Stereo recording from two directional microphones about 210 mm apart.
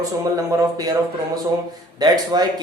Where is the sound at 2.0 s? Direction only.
20° right (ahead or behind).